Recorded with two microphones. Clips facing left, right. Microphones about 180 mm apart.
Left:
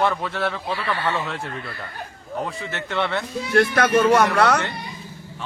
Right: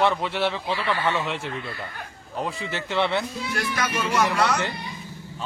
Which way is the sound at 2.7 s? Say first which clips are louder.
Right 1 dB; 30° right (ahead or behind).